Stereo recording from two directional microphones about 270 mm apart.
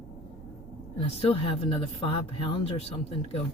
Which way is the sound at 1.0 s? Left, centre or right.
Left.